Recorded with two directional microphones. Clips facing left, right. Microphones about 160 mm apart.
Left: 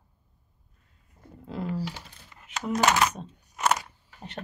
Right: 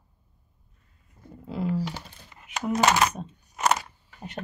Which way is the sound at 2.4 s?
10° right (ahead or behind).